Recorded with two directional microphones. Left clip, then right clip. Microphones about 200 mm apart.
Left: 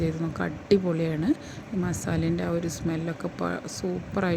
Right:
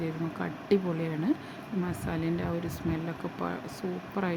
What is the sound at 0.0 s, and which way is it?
Speech, 15° left (ahead or behind).